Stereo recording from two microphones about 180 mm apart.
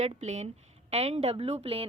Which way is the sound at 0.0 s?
40° right (ahead or behind).